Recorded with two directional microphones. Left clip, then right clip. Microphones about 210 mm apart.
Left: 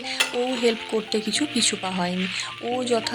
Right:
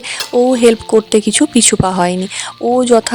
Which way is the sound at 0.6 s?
45° right (ahead or behind).